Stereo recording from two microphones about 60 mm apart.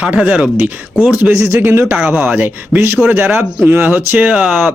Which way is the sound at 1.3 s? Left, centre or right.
Right.